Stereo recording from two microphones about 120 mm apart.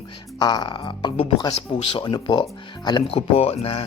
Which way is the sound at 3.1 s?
60° left (ahead or behind).